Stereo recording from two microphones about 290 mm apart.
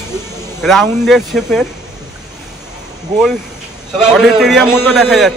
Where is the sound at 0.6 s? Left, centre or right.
Centre.